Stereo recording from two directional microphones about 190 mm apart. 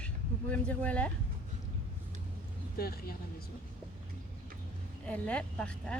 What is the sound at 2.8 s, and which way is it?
Speech, 55° left (ahead or behind).